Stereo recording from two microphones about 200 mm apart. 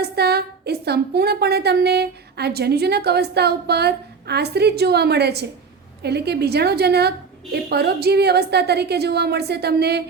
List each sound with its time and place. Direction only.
0.0 s a woman's voice: 55° right (ahead or behind)